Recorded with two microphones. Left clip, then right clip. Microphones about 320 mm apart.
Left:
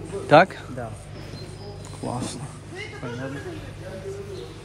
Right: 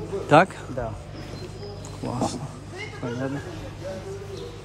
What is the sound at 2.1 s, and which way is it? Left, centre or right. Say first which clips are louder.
Speech: right 3 dB; centre.